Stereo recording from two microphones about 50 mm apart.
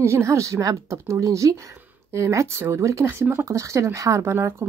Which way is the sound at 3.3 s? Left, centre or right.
Right.